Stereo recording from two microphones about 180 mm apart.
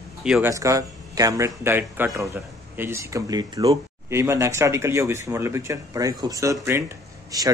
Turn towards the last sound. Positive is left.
turn(degrees=-20)  # may be behind; listen again after turning